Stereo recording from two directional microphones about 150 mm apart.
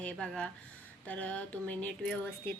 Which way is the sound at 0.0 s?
5° left (ahead or behind).